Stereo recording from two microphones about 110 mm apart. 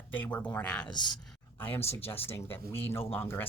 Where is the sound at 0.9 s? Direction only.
40° left (ahead or behind).